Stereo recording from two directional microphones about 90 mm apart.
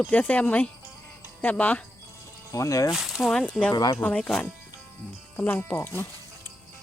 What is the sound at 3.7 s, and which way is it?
Speech, 50° left (ahead or behind).